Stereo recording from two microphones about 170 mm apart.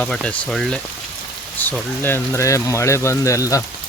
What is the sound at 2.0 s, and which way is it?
Speech, 15° left (ahead or behind).